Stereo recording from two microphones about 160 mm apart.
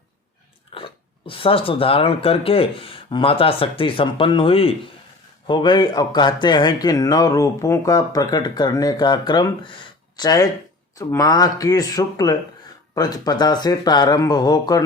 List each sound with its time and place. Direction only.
0.7 s a man's voice: 35° left (ahead or behind)